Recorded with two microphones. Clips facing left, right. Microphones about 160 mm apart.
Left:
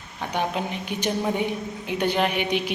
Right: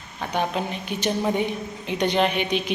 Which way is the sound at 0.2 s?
15° left (ahead or behind).